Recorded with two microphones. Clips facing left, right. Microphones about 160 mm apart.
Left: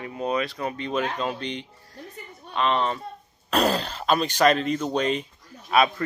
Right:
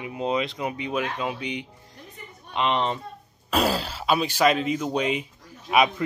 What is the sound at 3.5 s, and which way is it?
A man's voice, 5° right (ahead or behind).